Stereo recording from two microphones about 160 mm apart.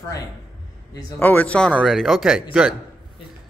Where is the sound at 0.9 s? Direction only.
15° left (ahead or behind).